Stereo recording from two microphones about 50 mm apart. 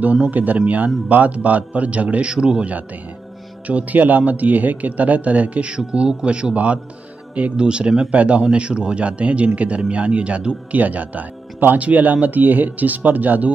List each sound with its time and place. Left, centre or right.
0.0 s a man's voice: right
3.6 s a man's voice: right